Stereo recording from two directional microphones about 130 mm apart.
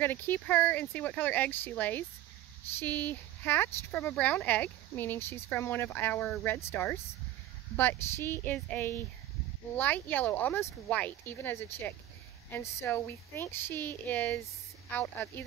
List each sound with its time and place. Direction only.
0.0 s speech: 15° left (ahead or behind)